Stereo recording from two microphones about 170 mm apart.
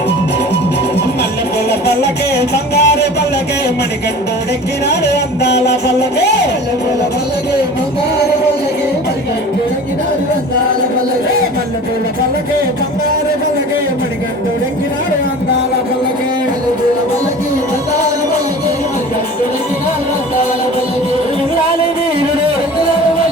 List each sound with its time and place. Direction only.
2.0 s music: 70° left (ahead or behind)
4.9 s music: 75° left (ahead or behind)